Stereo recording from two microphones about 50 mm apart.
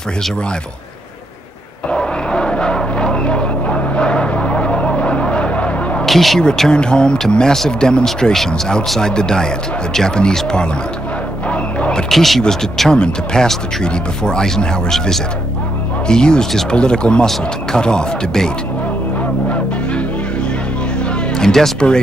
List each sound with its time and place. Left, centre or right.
1.9 s a sound: centre
6.0 s speech: centre
6.7 s speech: centre
11.4 s a sound: left
12.1 s speech: centre
19.5 s music: left; by 21.7 s centre
21.7 s speech: centre